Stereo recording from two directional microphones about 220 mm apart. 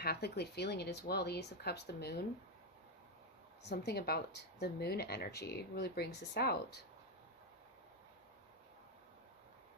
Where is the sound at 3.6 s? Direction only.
45° left (ahead or behind).